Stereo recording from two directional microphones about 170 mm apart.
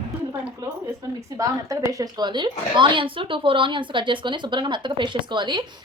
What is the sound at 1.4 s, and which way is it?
A woman's voice, 20° right (ahead or behind).